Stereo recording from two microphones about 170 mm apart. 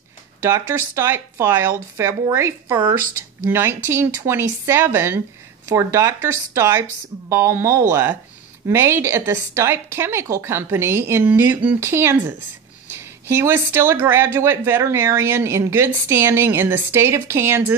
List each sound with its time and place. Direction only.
0.4 s speech: 15° right (ahead or behind)